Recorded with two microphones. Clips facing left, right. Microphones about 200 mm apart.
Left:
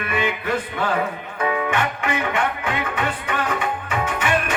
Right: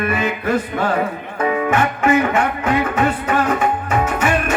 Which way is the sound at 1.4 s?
40° right (ahead or behind).